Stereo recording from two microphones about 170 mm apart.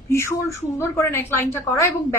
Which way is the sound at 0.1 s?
15° left (ahead or behind).